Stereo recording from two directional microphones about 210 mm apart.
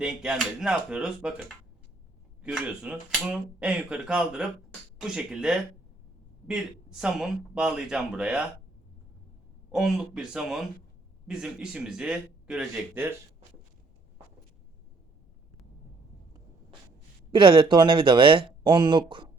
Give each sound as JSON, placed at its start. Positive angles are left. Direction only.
{"t": 0.0, "sound": "speech", "side_deg": -5}
{"t": 9.7, "sound": "speech", "side_deg": 0}
{"t": 17.3, "sound": "speech", "side_deg": -25}